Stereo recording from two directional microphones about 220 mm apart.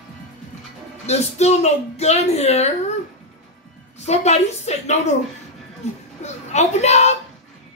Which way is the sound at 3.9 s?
30° left (ahead or behind).